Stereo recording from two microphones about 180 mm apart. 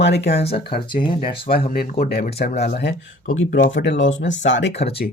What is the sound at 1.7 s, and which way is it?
Speech, 50° left (ahead or behind).